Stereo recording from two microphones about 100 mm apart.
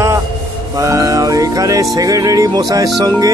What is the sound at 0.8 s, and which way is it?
Speech, 35° right (ahead or behind).